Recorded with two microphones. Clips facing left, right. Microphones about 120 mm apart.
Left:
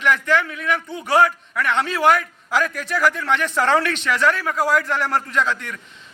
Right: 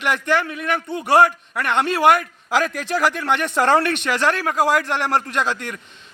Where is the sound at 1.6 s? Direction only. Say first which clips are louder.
Right 2 dB; 60° right (ahead or behind).